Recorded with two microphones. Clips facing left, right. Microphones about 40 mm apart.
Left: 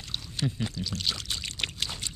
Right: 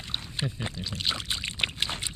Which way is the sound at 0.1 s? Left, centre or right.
Right.